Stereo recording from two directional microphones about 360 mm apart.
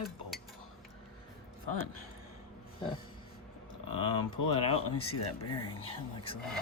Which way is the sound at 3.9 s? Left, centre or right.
Centre.